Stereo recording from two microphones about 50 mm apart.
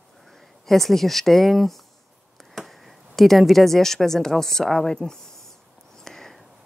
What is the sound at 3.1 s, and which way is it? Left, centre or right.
A woman's voice, centre.